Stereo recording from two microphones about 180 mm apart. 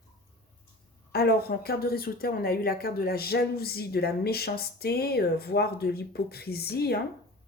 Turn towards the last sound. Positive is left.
turn(degrees=60)  # may be behind; listen again after turning